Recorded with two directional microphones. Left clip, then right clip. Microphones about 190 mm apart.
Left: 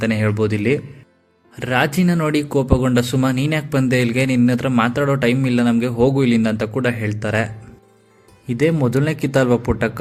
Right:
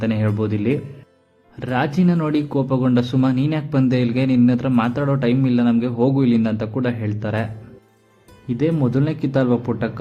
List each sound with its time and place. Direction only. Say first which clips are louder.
0.0 s speech: left 3 dB; 25° left (ahead or behind)